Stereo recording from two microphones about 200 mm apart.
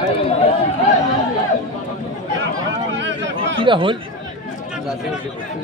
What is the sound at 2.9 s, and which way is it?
Speech, 65° right (ahead or behind).